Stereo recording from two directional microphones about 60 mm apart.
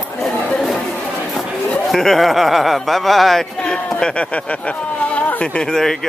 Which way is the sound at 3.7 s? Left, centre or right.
Centre.